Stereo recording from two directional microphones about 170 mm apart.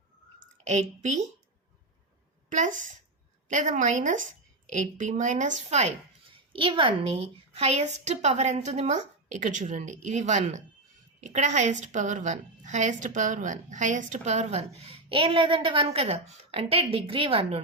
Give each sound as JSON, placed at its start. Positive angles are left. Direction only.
{"t": 0.6, "sound": "a woman's voice", "side_deg": -40}
{"t": 2.5, "sound": "a woman's voice", "side_deg": -45}
{"t": 6.5, "sound": "a woman's voice", "side_deg": -30}